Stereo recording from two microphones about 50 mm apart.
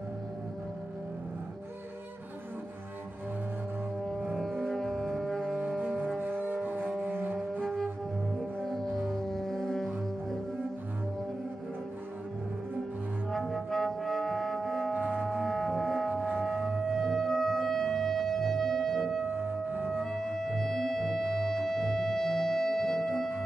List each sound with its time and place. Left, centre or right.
4.0 s music: centre
6.2 s a sound: right
7.6 s music: centre
13.3 s music: centre
19.3 s music: right
20.0 s music: centre